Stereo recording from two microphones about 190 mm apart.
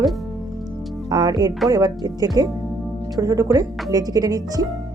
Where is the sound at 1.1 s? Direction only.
20° right (ahead or behind).